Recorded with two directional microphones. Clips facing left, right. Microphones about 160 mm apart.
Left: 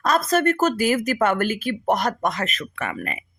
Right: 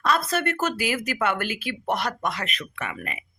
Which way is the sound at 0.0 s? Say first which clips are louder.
Left 4 dB; 40° left (ahead or behind).